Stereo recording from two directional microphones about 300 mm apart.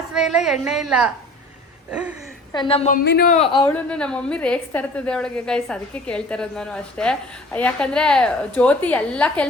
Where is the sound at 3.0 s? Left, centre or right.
Left; by 3.7 s centre.